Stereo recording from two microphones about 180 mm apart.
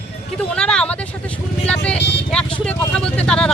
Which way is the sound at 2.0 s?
75° left (ahead or behind).